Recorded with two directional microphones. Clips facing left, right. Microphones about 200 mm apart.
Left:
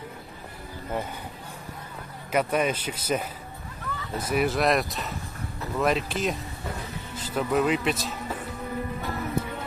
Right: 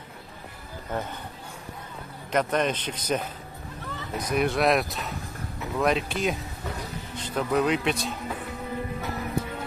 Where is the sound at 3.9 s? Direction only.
25° right (ahead or behind).